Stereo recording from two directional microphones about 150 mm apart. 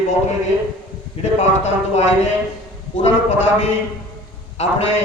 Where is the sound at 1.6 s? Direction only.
50° left (ahead or behind).